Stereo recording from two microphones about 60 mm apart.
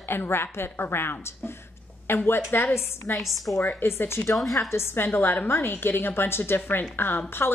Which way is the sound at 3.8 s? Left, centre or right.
Left.